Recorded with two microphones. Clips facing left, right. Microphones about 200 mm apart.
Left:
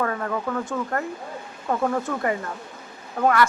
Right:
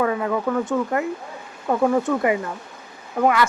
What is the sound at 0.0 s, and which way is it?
A man's voice, 10° right (ahead or behind).